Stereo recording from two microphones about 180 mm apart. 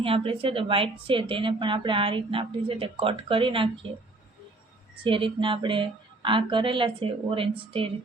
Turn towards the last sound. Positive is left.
turn(degrees=-30)  # may be behind; listen again after turning